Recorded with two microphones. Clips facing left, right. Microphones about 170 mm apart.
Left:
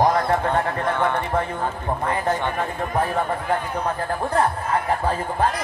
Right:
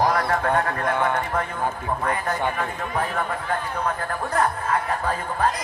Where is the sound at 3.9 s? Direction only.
30° left (ahead or behind).